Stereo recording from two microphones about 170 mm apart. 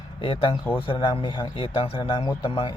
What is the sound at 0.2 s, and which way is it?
A man's voice, 30° left (ahead or behind).